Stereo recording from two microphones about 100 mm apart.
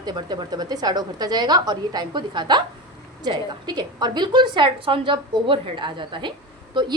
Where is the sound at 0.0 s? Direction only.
45° right (ahead or behind).